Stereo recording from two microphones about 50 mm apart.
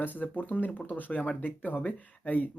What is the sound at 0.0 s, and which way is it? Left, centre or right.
Speech, left.